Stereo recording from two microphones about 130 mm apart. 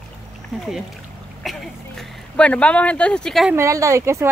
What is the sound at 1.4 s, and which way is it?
Speech, centre (ahead or behind).